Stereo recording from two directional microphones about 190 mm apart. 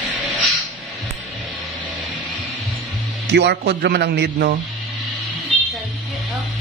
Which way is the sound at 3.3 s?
60° right (ahead or behind).